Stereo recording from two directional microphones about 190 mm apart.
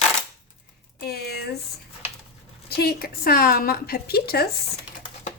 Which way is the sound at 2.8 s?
55° left (ahead or behind).